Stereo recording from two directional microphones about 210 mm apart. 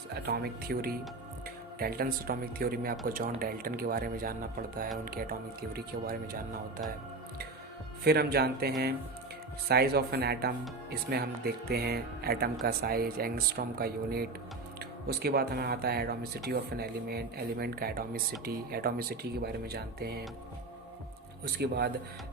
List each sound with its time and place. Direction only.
0.3 s speech: 50° right (ahead or behind)
8.0 s speech: 50° right (ahead or behind)
21.4 s speech: 50° right (ahead or behind)